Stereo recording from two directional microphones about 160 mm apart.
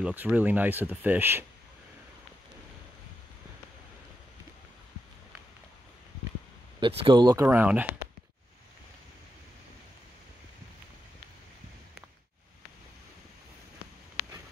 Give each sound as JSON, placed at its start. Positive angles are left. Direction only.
{"t": 0.0, "sound": "speech", "side_deg": -10}
{"t": 6.8, "sound": "speech", "side_deg": -35}
{"t": 7.4, "sound": "speech", "side_deg": -10}